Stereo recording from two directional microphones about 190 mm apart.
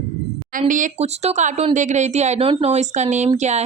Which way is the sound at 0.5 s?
45° right (ahead or behind).